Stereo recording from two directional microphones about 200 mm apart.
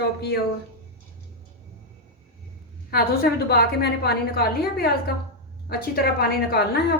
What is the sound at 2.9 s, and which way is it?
A woman's voice, 50° left (ahead or behind).